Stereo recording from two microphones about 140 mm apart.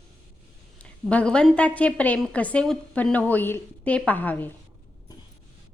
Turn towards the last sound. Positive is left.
turn(degrees=15)  # may be behind; listen again after turning